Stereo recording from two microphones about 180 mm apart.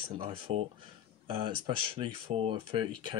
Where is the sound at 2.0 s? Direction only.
30° right (ahead or behind).